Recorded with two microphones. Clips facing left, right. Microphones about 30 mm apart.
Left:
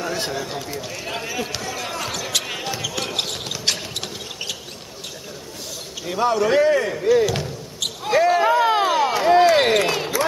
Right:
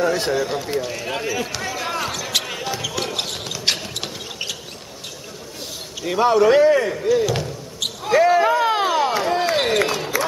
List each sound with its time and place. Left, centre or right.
0.0 s speech: centre
1.7 s speech: centre
2.0 s basketball bounce: centre
3.6 s a sound: centre
6.0 s speech: centre
9.2 s a sound: centre